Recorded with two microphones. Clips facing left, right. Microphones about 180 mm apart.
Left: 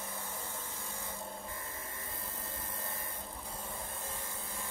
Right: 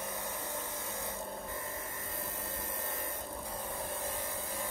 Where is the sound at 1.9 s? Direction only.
55° right (ahead or behind).